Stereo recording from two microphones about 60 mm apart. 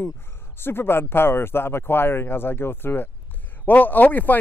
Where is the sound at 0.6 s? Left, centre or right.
Left.